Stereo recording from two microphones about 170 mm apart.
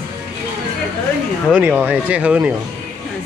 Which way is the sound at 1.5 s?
10° right (ahead or behind).